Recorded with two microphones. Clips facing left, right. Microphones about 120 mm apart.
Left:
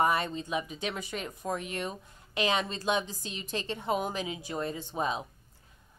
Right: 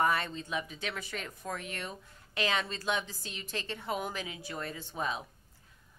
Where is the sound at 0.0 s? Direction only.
20° left (ahead or behind).